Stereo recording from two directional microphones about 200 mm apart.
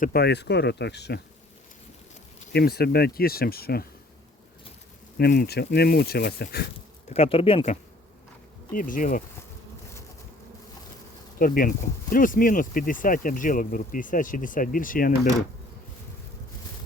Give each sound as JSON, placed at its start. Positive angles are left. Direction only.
{"t": 0.0, "sound": "speech", "side_deg": 50}
{"t": 2.5, "sound": "speech", "side_deg": 55}
{"t": 5.1, "sound": "speech", "side_deg": 50}
{"t": 7.1, "sound": "speech", "side_deg": 30}
{"t": 8.7, "sound": "speech", "side_deg": 40}
{"t": 11.3, "sound": "speech", "side_deg": 45}